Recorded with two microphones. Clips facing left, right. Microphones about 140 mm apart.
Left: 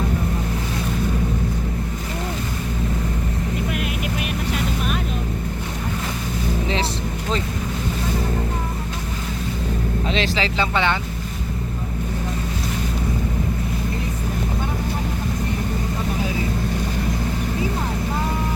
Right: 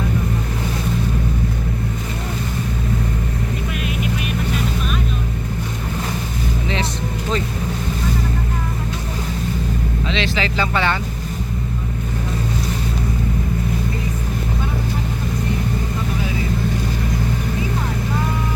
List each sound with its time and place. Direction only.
10.1 s speech: 40° left (ahead or behind); by 10.9 s 20° left (ahead or behind)